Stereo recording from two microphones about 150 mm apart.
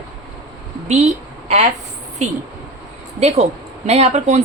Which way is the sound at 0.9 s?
50° right (ahead or behind).